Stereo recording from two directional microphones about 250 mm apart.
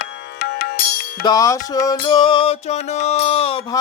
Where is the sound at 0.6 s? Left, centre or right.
Left.